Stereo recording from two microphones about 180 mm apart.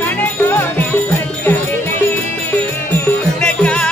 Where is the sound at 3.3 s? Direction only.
5° left (ahead or behind).